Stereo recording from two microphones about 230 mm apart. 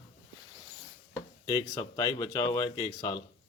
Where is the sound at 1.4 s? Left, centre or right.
Centre.